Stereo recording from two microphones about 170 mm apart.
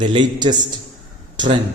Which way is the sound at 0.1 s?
25° right (ahead or behind).